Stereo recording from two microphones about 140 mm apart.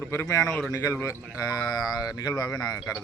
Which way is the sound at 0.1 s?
20° left (ahead or behind).